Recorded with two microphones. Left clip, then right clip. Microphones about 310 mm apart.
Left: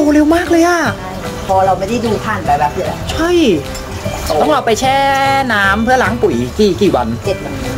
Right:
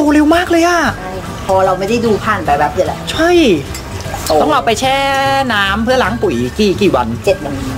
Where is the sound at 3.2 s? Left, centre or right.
Centre.